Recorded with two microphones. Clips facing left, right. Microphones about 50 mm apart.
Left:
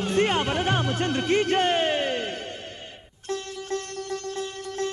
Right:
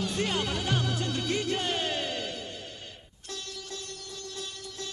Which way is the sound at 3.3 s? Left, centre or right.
Left.